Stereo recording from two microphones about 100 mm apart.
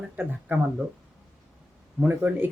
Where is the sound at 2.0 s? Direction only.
15° right (ahead or behind).